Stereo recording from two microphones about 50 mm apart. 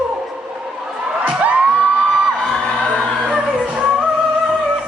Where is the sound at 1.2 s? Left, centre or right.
Right.